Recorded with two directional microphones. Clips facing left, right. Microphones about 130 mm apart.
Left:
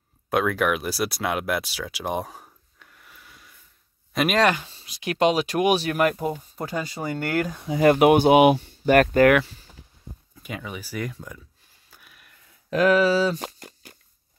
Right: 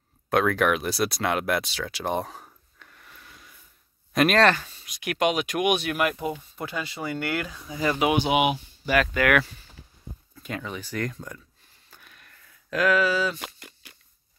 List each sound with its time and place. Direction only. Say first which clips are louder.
0.3 s speech: even; 5° left (ahead or behind)
4.6 s speech: left 2 dB; 30° left (ahead or behind)
7.6 s speech: left 9 dB; 55° left (ahead or behind)
10.4 s speech: right 1 dB; 10° left (ahead or behind)
11.9 s a sound: right 1 dB; 5° left (ahead or behind)
12.6 s speech: left 4 dB; 30° left (ahead or behind)